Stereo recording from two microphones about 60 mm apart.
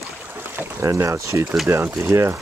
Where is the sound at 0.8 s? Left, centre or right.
Right.